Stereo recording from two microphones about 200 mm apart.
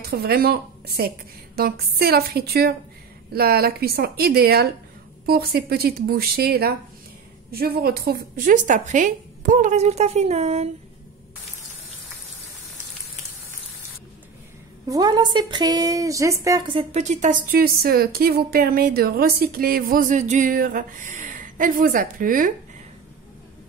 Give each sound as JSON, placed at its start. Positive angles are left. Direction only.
{"t": 0.0, "sound": "a woman's voice", "side_deg": -50}
{"t": 14.9, "sound": "speech", "side_deg": -20}